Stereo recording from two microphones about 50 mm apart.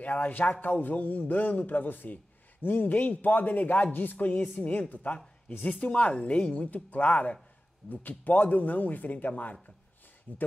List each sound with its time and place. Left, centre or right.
0.0 s a woman's voice: left